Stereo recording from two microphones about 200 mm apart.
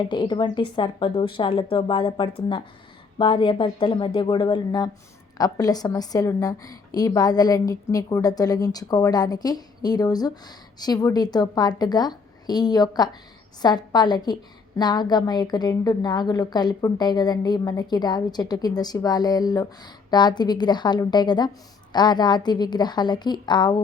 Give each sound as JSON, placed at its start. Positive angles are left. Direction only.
{"t": 0.0, "sound": "a woman's voice", "side_deg": 25}